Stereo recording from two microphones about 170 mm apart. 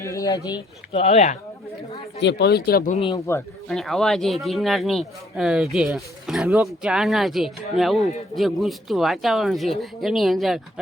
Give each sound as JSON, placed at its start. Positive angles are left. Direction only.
{"t": 0.0, "sound": "speech", "side_deg": 20}
{"t": 0.9, "sound": "speech", "side_deg": 40}
{"t": 2.2, "sound": "speech", "side_deg": 75}
{"t": 2.9, "sound": "speech", "side_deg": 30}
{"t": 3.7, "sound": "speech", "side_deg": 0}